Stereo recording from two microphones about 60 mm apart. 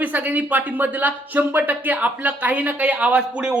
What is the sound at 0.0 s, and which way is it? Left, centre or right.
Speech, right.